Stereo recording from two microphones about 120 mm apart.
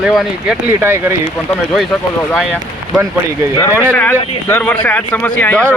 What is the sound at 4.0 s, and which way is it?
Speech, 15° left (ahead or behind).